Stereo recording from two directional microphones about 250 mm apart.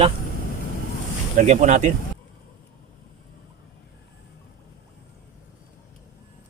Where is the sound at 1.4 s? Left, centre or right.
Right.